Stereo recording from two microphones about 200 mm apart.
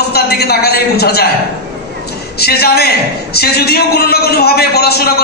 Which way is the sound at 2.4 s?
50° left (ahead or behind).